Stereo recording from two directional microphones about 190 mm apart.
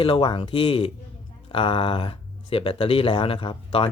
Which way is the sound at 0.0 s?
25° left (ahead or behind).